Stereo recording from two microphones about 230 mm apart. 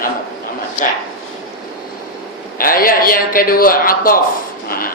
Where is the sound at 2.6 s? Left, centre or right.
Left.